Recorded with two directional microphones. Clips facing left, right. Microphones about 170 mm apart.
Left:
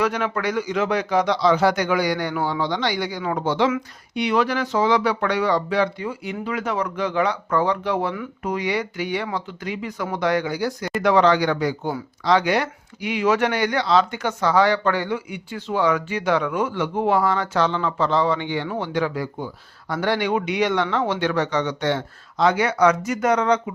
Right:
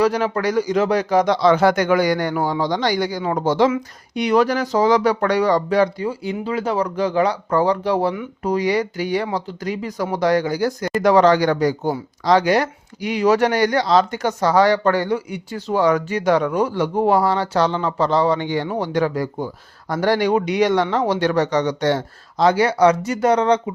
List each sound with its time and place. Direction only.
0.0 s speech: 35° right (ahead or behind)